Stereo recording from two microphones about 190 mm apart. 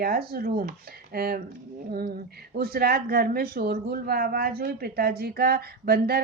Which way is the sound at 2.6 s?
55° right (ahead or behind).